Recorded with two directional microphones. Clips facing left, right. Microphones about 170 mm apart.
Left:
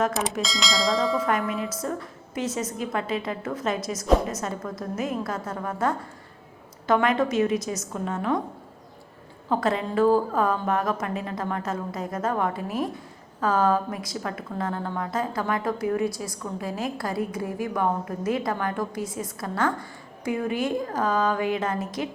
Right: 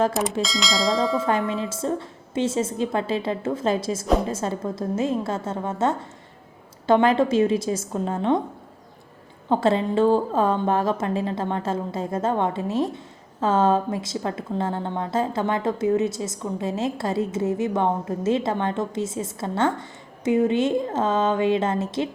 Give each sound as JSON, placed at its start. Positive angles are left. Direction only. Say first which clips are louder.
{"t": 0.4, "sound": "bell", "louder": "right 2 dB", "side_deg": 0}
{"t": 1.2, "sound": "a woman's voice", "louder": "right 2 dB", "side_deg": -25}
{"t": 9.5, "sound": "a woman's voice", "louder": "right 4 dB", "side_deg": -30}